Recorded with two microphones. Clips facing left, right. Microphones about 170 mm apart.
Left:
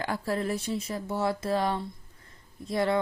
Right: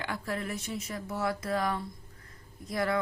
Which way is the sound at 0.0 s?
35° left (ahead or behind).